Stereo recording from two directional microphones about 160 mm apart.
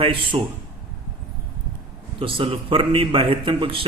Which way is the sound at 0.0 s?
35° right (ahead or behind).